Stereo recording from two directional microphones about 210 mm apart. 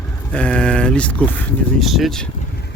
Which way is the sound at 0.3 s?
5° left (ahead or behind).